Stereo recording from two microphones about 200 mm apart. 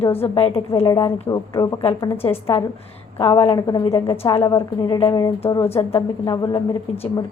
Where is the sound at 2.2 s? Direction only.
30° left (ahead or behind).